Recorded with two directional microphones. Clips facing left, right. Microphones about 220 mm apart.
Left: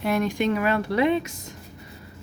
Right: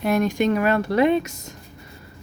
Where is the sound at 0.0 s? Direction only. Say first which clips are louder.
Right 3 dB; 45° right (ahead or behind).